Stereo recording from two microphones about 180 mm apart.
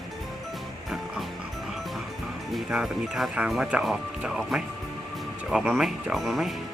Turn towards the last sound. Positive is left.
turn(degrees=0)  # may be behind; listen again after turning